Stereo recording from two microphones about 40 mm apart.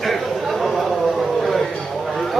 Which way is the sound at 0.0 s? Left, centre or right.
Centre.